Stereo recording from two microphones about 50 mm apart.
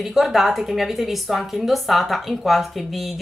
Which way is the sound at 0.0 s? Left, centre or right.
Centre.